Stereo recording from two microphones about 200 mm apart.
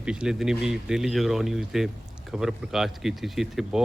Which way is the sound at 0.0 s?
5° right (ahead or behind).